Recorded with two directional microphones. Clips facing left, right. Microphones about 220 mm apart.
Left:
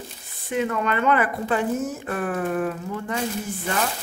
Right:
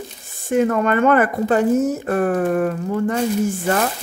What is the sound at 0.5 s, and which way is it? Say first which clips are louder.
Speech: right 7 dB; 45° right (ahead or behind).